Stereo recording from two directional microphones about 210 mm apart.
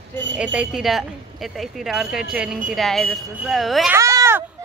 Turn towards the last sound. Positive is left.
turn(degrees=-15)  # may be behind; listen again after turning